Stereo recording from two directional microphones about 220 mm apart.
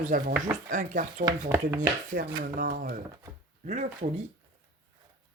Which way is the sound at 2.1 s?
45° right (ahead or behind).